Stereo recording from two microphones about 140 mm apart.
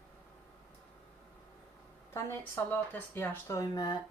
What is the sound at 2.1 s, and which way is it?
Speech, 15° left (ahead or behind).